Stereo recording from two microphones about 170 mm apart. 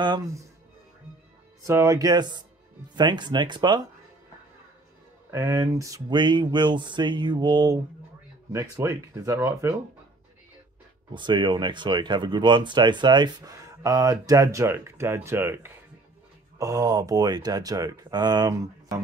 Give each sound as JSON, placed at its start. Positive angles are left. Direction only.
{"t": 0.0, "sound": "speech", "side_deg": -25}
{"t": 1.7, "sound": "speech", "side_deg": -15}
{"t": 5.3, "sound": "speech", "side_deg": -15}
{"t": 11.1, "sound": "speech", "side_deg": -25}